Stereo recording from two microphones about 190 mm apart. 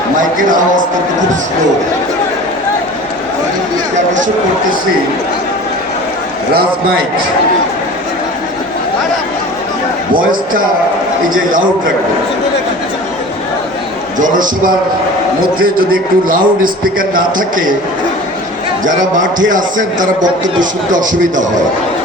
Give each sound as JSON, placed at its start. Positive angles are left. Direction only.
{"t": 0.2, "sound": "a man's voice", "side_deg": -45}
{"t": 14.2, "sound": "a man's voice", "side_deg": -45}
{"t": 19.5, "sound": "a man's voice", "side_deg": -45}